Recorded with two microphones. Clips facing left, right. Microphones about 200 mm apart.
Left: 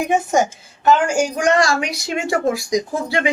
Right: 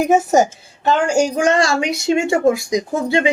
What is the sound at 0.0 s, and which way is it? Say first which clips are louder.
Speech: right 4 dB; 40° right (ahead or behind).